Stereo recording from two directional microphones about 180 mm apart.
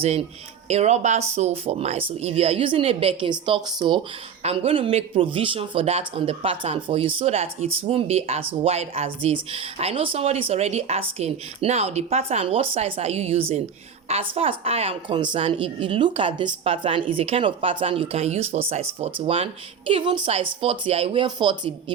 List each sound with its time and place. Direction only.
0.0 s a woman's voice: 35° right (ahead or behind)